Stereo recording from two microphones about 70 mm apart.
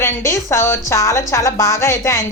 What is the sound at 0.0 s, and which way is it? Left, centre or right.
A woman's voice, left.